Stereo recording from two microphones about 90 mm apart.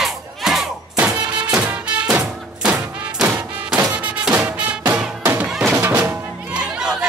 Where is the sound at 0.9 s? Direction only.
15° right (ahead or behind).